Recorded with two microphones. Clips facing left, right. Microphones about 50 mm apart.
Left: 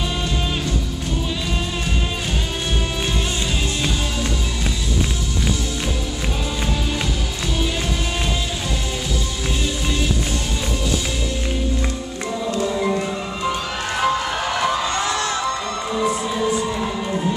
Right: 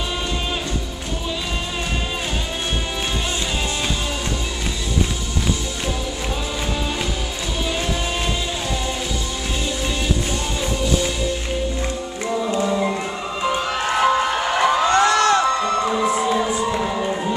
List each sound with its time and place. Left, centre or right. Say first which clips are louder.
12.4 s music: left 1 dB; centre
14.9 s crowd: right 7 dB; right
15.4 s music: right 5 dB; right
16.7 s music: right 2 dB; centre